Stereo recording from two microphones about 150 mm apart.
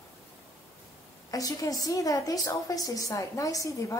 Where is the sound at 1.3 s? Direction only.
25° left (ahead or behind).